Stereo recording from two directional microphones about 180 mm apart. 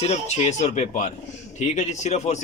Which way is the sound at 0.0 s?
35° left (ahead or behind).